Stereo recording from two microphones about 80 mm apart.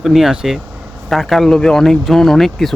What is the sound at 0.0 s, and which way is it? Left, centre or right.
Speech, centre.